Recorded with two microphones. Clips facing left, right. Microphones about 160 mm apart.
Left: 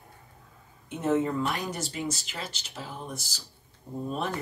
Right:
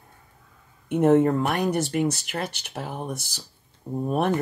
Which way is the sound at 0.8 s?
60° right (ahead or behind).